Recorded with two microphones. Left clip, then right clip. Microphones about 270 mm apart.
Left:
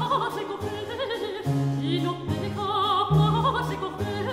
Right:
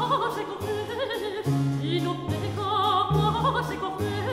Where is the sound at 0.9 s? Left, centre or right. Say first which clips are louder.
Even; centre.